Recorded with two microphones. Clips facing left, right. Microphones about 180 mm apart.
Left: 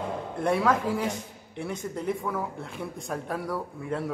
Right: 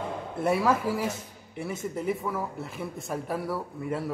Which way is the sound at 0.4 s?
5° right (ahead or behind).